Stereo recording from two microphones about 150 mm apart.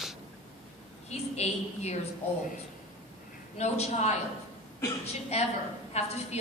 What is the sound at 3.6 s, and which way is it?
Speech, 50° left (ahead or behind).